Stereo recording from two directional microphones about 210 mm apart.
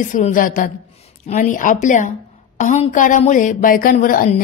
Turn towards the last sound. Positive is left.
turn(degrees=40)  # may be behind; listen again after turning